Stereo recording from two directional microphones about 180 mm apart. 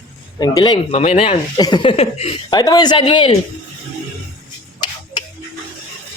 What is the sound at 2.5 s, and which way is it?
Speech, 20° left (ahead or behind).